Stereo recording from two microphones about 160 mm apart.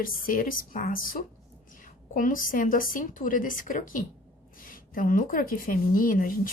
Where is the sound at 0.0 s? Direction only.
60° left (ahead or behind).